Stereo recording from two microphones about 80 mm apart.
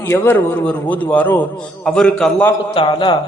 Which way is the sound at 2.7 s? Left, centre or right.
Left.